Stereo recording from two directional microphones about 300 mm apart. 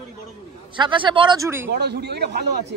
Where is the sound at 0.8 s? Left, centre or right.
Centre.